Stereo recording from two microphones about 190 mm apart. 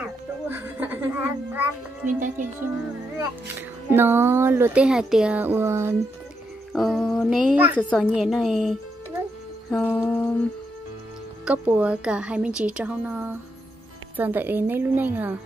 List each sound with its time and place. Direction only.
0.0 s music: 10° right (ahead or behind)
2.1 s speech: 40° right (ahead or behind)
3.9 s speech: 10° right (ahead or behind)
6.7 s speech: centre (ahead or behind)
9.7 s music: 10° left (ahead or behind)
11.4 s speech: 10° right (ahead or behind)